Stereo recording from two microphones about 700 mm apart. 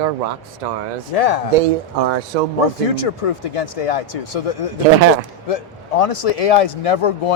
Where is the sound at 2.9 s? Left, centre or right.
Left.